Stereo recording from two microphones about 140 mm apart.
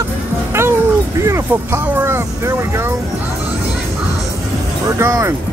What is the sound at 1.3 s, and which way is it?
Speech, 15° right (ahead or behind).